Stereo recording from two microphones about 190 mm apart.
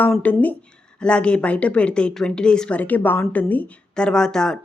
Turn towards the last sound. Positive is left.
turn(degrees=5)  # may be behind; listen again after turning